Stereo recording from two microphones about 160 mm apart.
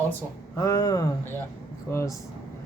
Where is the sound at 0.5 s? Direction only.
20° left (ahead or behind).